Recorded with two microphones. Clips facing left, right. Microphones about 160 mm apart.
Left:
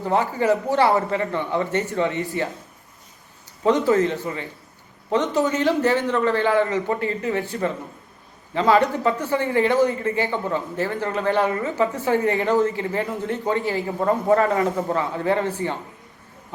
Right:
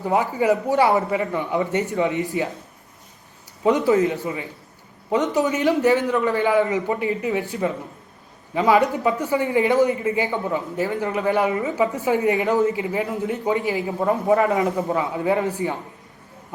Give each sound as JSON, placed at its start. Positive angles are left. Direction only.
{"t": 0.0, "sound": "speech", "side_deg": -15}
{"t": 3.6, "sound": "speech", "side_deg": -15}
{"t": 8.5, "sound": "speech", "side_deg": -15}